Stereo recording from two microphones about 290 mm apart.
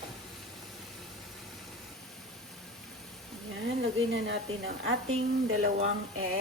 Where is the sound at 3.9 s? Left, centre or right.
Right.